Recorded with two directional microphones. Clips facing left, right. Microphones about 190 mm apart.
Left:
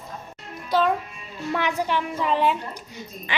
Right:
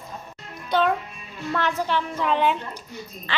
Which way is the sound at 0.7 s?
Centre (ahead or behind).